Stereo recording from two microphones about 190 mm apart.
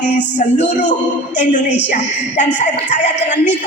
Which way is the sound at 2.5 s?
40° left (ahead or behind).